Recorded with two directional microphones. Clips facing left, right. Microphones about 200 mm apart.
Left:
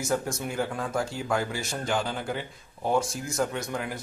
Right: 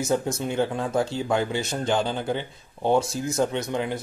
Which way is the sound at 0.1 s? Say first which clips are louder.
Right 3 dB; 25° right (ahead or behind).